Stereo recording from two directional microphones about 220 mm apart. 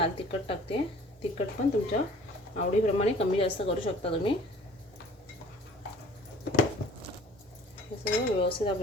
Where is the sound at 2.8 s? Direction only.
30° left (ahead or behind).